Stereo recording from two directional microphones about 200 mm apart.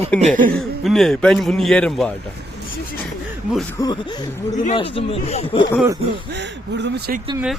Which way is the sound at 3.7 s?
20° left (ahead or behind).